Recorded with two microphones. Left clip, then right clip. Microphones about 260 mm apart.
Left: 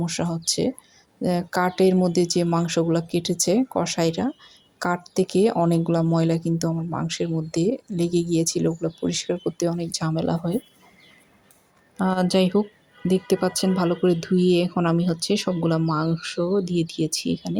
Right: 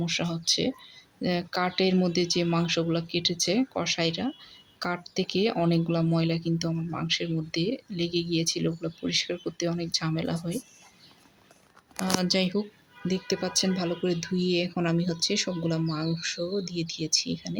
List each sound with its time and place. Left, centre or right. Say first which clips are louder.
0.0 s speech: left 2 dB; centre
11.9 s speech: left 5 dB; centre